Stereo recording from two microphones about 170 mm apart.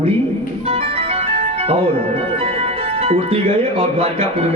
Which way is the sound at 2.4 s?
35° right (ahead or behind).